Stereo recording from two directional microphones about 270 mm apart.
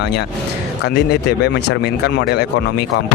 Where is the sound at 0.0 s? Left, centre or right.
Left.